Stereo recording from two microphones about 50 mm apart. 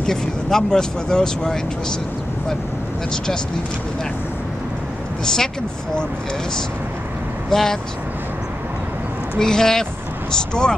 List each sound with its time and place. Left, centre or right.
0.0 s speech: centre
5.2 s speech: centre
7.4 s speech: centre
9.4 s speech: centre